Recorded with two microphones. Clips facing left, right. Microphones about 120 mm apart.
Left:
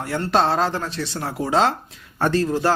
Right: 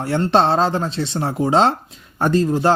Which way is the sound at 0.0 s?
30° right (ahead or behind).